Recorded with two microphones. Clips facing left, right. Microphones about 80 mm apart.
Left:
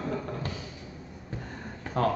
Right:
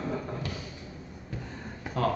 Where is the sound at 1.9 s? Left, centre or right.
Centre.